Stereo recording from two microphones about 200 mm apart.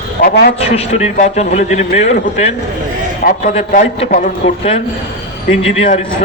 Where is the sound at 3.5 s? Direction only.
35° left (ahead or behind).